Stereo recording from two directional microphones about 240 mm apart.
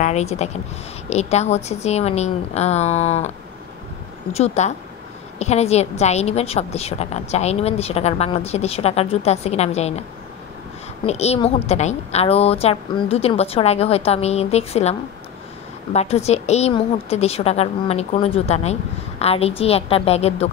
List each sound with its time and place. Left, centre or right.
0.0 s a woman's voice: left
4.3 s a woman's voice: left
11.1 s a woman's voice: left